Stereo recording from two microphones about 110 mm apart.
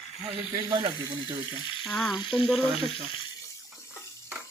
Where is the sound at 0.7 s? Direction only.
45° right (ahead or behind).